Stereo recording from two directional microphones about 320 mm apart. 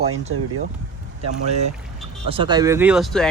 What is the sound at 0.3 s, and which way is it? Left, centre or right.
Speech, right.